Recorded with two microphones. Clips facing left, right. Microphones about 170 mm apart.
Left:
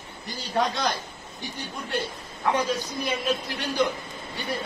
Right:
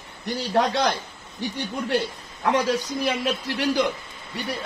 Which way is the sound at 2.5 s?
75° right (ahead or behind).